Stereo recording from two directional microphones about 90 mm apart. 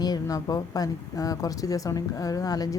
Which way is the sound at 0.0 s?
45° left (ahead or behind).